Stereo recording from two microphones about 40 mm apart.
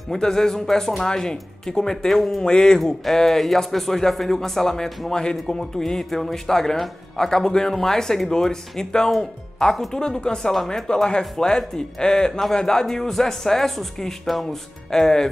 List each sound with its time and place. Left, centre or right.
0.1 s speech: centre
2.4 s speech: centre